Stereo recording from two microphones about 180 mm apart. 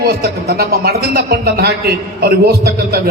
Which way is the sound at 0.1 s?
60° right (ahead or behind).